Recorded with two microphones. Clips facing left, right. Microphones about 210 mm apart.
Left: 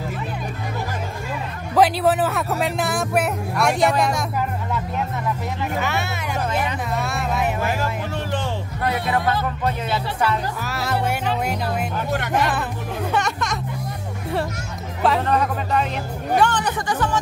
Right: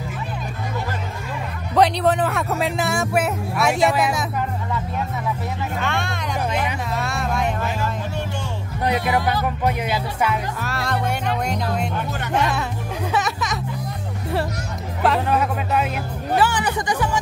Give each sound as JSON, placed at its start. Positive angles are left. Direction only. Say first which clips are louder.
{"t": 1.8, "sound": "speech", "louder": "even", "side_deg": 5}
{"t": 5.8, "sound": "speech", "louder": "even", "side_deg": 5}
{"t": 6.9, "sound": "a sound", "louder": "even", "side_deg": 0}
{"t": 8.8, "sound": "speech", "louder": "right 2 dB", "side_deg": -15}
{"t": 10.6, "sound": "speech", "louder": "left 1 dB", "side_deg": 0}
{"t": 15.0, "sound": "speech", "louder": "even", "side_deg": -5}